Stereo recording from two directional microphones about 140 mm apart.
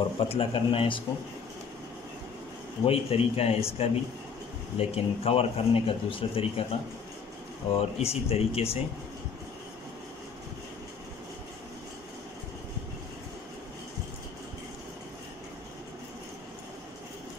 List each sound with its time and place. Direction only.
0.2 s speech: 40° left (ahead or behind)
2.8 s speech: 45° left (ahead or behind)
7.6 s speech: 40° left (ahead or behind)